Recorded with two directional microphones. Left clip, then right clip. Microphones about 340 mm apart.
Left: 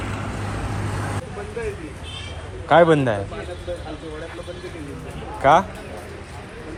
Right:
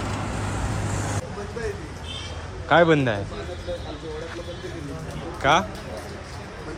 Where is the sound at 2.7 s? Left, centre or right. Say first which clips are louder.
Left 3 dB; centre.